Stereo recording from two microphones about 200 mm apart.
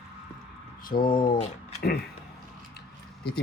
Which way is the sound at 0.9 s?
45° left (ahead or behind).